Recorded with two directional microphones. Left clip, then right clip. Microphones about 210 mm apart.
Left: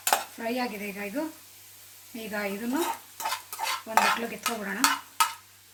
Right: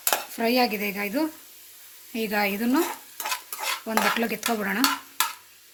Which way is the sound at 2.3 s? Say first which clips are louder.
Right 6 dB; 50° right (ahead or behind).